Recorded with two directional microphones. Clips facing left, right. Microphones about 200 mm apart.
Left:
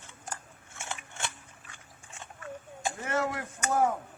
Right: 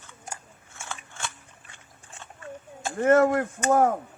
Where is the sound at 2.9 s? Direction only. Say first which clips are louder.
Right 14 dB; 50° right (ahead or behind).